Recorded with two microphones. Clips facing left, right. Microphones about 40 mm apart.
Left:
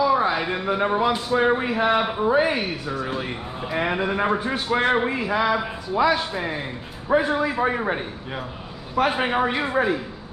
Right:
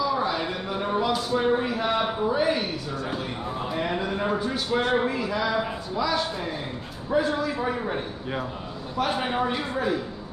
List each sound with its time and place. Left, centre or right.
0.0 s a man's voice: left